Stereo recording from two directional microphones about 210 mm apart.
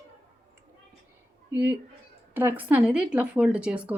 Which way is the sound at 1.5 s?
10° right (ahead or behind).